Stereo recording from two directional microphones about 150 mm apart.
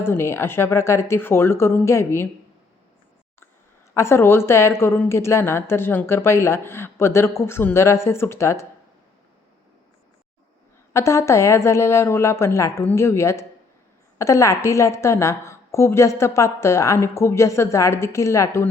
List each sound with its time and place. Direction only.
0.0 s a woman's voice: 15° left (ahead or behind)
3.9 s a woman's voice: 15° left (ahead or behind)
10.9 s a woman's voice: 20° left (ahead or behind)